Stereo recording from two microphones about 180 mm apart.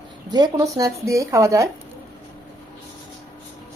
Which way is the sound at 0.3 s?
20° right (ahead or behind).